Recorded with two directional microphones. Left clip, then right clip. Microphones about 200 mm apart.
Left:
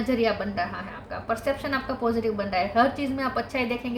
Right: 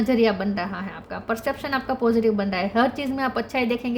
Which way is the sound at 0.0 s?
50° right (ahead or behind).